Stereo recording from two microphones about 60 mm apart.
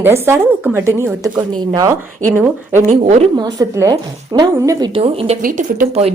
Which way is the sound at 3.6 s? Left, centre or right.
Right.